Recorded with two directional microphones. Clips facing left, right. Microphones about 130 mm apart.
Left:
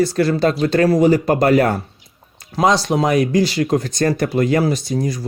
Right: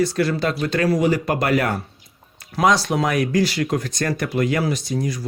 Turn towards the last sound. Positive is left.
turn(degrees=35)  # may be behind; listen again after turning